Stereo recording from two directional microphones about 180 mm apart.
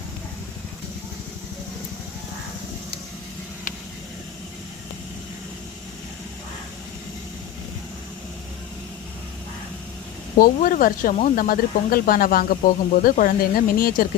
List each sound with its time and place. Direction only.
10.3 s speech: 50° left (ahead or behind)